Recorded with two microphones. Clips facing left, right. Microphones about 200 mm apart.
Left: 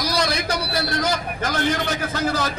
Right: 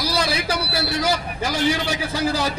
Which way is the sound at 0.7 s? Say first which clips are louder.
Right 1 dB; 5° right (ahead or behind).